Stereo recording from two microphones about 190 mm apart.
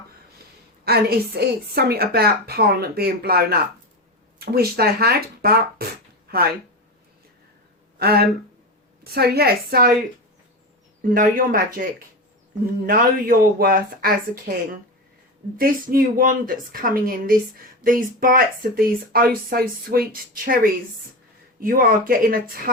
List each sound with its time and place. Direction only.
0.9 s a woman's voice: 55° right (ahead or behind)
7.9 s a woman's voice: 55° right (ahead or behind)
11.0 s speech: 45° right (ahead or behind)
15.5 s speech: 50° right (ahead or behind)